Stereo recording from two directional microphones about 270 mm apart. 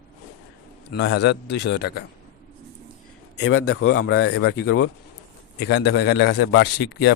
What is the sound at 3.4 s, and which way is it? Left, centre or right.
A man's voice, left.